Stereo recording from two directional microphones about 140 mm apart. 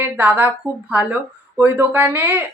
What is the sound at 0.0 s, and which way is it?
A woman's voice, 10° right (ahead or behind).